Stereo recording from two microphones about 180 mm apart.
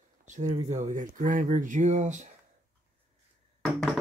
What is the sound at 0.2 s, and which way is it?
Speech, 40° right (ahead or behind).